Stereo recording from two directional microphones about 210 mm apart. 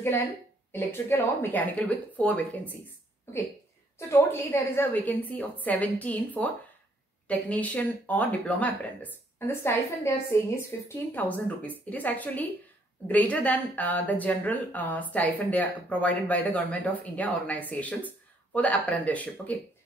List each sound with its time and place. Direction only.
0.7 s speech: 10° left (ahead or behind)
4.1 s speech: 15° left (ahead or behind)
11.1 s speech: 5° left (ahead or behind)